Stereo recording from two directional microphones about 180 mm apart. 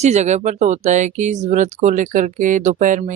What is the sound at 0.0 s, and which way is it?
Speech, 40° right (ahead or behind).